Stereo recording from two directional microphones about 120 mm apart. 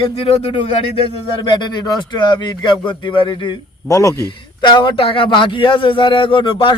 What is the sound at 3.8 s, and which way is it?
Speech, 25° left (ahead or behind).